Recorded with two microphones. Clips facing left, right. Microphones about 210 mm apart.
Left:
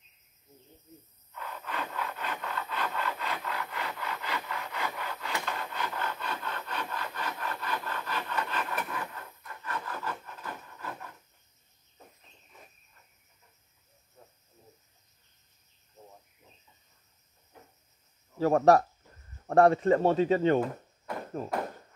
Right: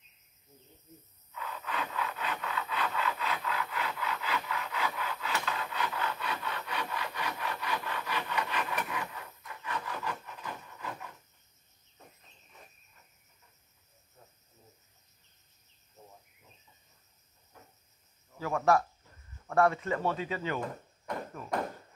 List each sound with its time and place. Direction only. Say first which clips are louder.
1.5 s a sound: even; 10° left (ahead or behind)
2.0 s wood: even; 5° right (ahead or behind)
6.0 s wood: even; 5° right (ahead or behind)
8.8 s a sound: even; 10° right (ahead or behind)
9.5 s rub: even; 10° right (ahead or behind)
10.0 s wood: even; 15° right (ahead or behind)
18.4 s speech: left 6 dB; 35° left (ahead or behind)